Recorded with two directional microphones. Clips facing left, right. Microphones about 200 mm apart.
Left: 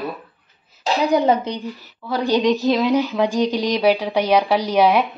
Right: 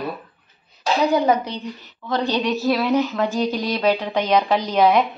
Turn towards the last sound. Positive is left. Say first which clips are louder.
# left 1 dB
turn(degrees=10)  # may be behind; listen again after turning